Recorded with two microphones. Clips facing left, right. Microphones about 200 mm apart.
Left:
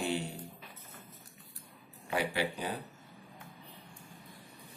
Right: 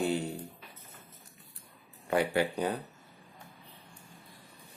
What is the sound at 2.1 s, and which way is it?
Speech, 50° right (ahead or behind).